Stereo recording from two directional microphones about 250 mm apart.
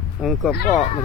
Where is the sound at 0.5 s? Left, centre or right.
Left.